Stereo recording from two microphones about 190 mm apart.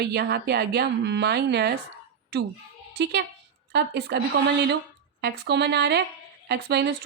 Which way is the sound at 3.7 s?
60° right (ahead or behind).